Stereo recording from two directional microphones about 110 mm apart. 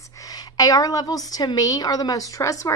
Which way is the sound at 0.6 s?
35° left (ahead or behind).